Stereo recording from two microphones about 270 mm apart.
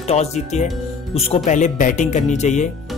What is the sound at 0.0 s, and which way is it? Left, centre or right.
Speech, left.